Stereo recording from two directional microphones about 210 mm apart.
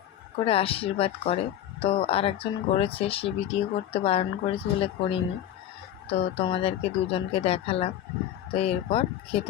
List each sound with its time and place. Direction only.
0.4 s speech: 25° left (ahead or behind)